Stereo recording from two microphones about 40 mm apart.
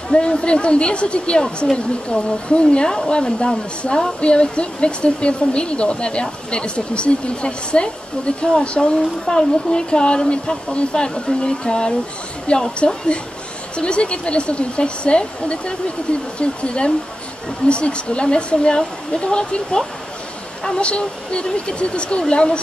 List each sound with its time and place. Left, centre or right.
0.1 s a woman's voice: left
8.5 s a woman's voice: centre